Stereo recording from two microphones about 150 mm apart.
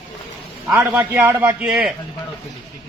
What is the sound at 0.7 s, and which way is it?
A man's voice, 10° right (ahead or behind).